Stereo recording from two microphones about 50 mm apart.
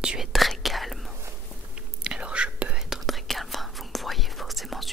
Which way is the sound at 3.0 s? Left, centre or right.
Centre.